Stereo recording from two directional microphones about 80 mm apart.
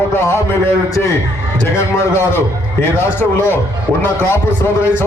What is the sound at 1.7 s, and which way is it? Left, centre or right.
A man's voice, left.